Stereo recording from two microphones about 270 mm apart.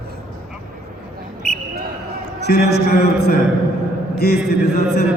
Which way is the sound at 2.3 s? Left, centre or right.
Left.